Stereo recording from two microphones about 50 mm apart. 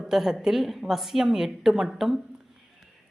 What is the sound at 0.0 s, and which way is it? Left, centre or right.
A woman's voice, centre.